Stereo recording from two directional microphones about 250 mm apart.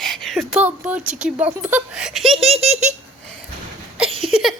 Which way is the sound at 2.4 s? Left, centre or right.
Right.